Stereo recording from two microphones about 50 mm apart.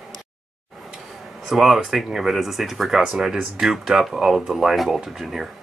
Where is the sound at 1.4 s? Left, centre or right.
Centre.